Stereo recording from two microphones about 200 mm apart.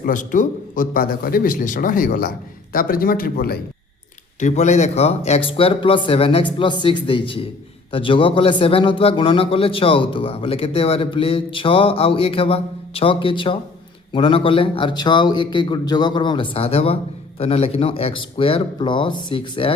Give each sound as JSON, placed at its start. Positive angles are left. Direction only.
{"t": 0.0, "sound": "a man's voice", "side_deg": 40}
{"t": 4.4, "sound": "a man's voice", "side_deg": 35}